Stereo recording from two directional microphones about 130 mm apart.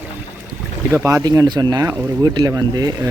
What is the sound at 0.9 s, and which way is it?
Speech, 25° right (ahead or behind).